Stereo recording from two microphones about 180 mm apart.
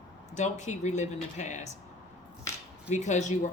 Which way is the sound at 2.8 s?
40° left (ahead or behind).